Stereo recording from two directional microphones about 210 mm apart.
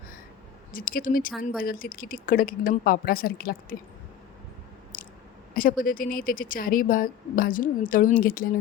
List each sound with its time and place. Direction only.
0.7 s a woman's voice: 40° left (ahead or behind)
4.9 s chewing: 40° left (ahead or behind)
5.5 s a woman's voice: 40° left (ahead or behind)